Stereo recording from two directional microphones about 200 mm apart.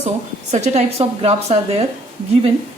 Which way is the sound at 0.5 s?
35° right (ahead or behind).